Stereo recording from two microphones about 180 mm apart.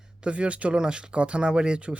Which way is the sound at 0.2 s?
5° right (ahead or behind).